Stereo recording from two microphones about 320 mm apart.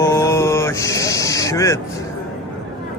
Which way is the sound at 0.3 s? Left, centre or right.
Centre.